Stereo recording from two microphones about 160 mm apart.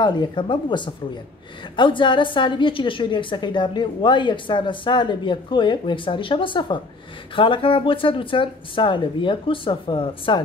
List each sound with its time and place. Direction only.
0.0 s a woman's voice: 30° left (ahead or behind)